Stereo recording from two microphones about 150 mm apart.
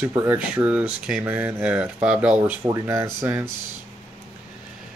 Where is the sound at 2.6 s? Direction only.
20° right (ahead or behind).